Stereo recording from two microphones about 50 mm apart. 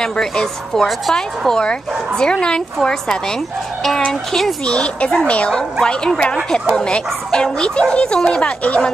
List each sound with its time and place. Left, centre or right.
0.0 s speech: centre
4.6 s speech: left
5.5 s speech: centre